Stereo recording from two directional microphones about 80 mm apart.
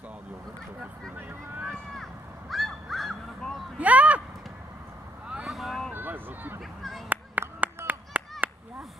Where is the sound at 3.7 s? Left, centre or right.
Centre.